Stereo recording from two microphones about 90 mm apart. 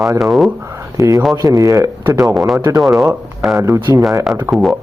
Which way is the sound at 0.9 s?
40° right (ahead or behind).